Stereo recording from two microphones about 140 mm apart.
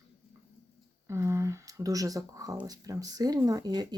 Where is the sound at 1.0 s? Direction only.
20° right (ahead or behind).